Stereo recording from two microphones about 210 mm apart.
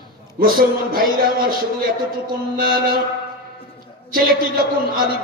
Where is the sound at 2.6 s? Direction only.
45° right (ahead or behind).